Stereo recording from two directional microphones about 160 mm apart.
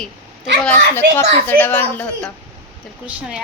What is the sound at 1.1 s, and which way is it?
A woman's voice, 10° left (ahead or behind).